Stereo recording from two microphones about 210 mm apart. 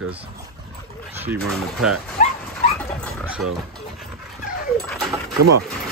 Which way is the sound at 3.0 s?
Centre (ahead or behind).